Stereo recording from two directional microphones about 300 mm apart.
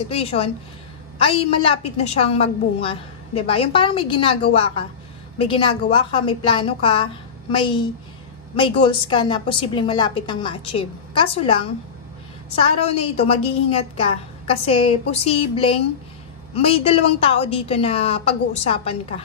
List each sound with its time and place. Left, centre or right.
0.1 s a woman's voice: centre
13.0 s a woman's voice: centre